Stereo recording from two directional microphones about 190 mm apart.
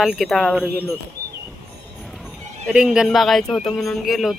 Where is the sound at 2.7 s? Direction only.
5° right (ahead or behind).